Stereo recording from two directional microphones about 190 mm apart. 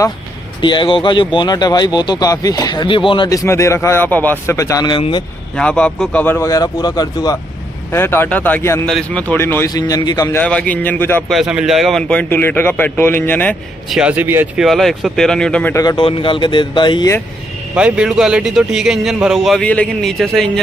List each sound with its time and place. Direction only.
0.6 s speech: 25° left (ahead or behind)
3.4 s speech: 15° left (ahead or behind)
5.6 s speech: 5° left (ahead or behind)
10.4 s speech: 5° left (ahead or behind)
11.3 s speech: 5° right (ahead or behind)
13.9 s a man's voice: 5° right (ahead or behind)
15.8 s speech: 20° left (ahead or behind)
17.7 s a man's voice: 5° right (ahead or behind)